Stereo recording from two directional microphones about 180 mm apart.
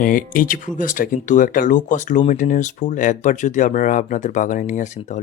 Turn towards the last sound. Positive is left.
turn(degrees=45)  # may be behind; listen again after turning